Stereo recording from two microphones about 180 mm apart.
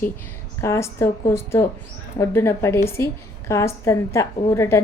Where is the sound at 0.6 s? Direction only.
15° left (ahead or behind).